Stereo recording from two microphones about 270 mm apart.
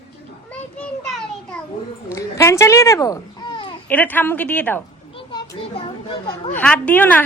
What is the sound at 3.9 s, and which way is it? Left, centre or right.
Speech, centre.